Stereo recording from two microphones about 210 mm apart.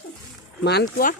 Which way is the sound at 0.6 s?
50° left (ahead or behind).